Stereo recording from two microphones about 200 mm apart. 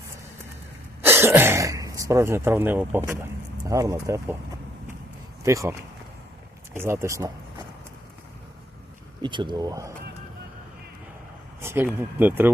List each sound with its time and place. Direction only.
1.0 s speech: 10° right (ahead or behind)
5.4 s speech: 15° right (ahead or behind)
6.7 s speech: 15° right (ahead or behind)
9.2 s speech: 25° right (ahead or behind)
11.6 s speech: 10° right (ahead or behind)